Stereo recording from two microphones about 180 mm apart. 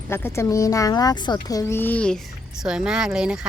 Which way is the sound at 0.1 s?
15° left (ahead or behind).